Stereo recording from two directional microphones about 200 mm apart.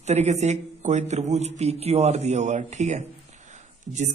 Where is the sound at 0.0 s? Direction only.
35° right (ahead or behind).